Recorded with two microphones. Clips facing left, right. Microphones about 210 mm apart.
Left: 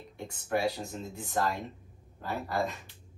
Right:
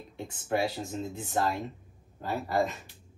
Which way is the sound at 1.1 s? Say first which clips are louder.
Even; 25° right (ahead or behind).